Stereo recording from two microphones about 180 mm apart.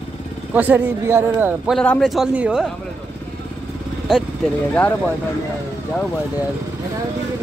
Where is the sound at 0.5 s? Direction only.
10° right (ahead or behind).